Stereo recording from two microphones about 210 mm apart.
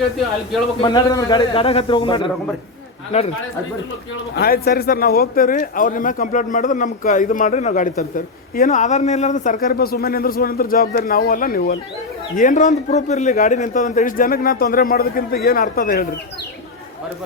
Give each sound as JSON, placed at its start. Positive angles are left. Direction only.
{"t": 0.8, "sound": "a man's voice", "side_deg": 20}
{"t": 4.4, "sound": "speech", "side_deg": 45}